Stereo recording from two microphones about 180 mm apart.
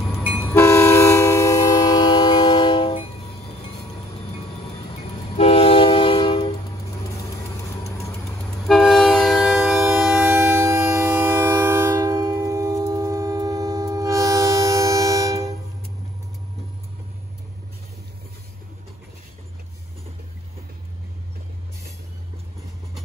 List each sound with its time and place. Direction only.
0.4 s train: 15° left (ahead or behind)
5.4 s train: 35° left (ahead or behind)
7.2 s vehicle: 20° left (ahead or behind)
8.4 s vehicle: centre (ahead or behind)
10.2 s train: 15° right (ahead or behind)